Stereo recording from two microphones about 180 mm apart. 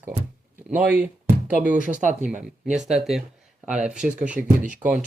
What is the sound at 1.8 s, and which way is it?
Speech, 45° right (ahead or behind).